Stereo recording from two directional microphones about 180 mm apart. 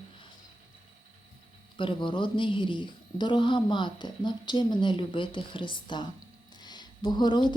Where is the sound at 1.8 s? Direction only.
30° left (ahead or behind).